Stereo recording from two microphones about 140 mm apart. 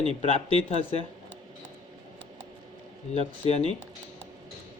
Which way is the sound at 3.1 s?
50° left (ahead or behind).